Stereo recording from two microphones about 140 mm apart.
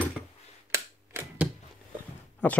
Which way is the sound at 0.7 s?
15° right (ahead or behind).